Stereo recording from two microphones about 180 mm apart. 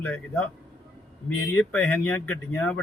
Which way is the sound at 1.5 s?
10° left (ahead or behind).